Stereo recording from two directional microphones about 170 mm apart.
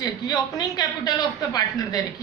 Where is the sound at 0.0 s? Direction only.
20° left (ahead or behind).